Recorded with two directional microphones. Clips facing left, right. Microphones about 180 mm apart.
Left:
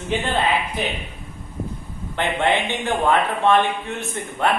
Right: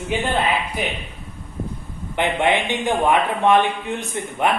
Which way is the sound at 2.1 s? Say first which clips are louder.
Right 1 dB; 15° right (ahead or behind).